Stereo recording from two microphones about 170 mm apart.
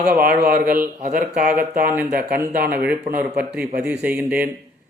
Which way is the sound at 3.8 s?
5° right (ahead or behind).